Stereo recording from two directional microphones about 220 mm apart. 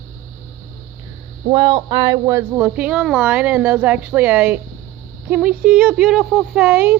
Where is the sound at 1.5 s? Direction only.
20° right (ahead or behind).